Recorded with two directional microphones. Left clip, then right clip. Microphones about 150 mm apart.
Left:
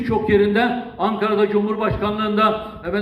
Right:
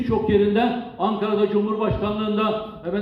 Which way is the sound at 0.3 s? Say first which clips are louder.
Left 3 dB; 30° right (ahead or behind).